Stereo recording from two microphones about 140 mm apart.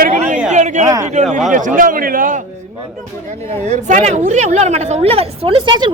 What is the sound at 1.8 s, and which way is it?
Speech, 85° right.